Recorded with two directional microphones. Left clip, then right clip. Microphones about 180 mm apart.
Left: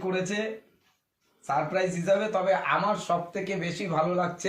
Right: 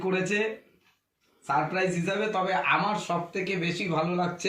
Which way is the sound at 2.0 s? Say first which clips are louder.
Left 3 dB; 15° left (ahead or behind).